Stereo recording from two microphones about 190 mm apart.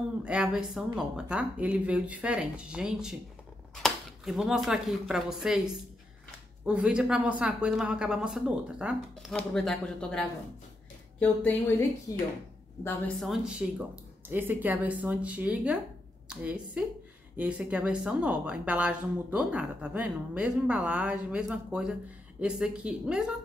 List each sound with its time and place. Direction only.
0.2 s speech: 5° right (ahead or behind)
12.1 s speech: 20° left (ahead or behind)
13.2 s a woman's voice: centre (ahead or behind)